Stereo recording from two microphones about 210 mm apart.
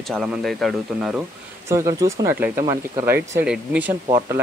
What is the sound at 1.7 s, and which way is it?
Speech, 15° right (ahead or behind).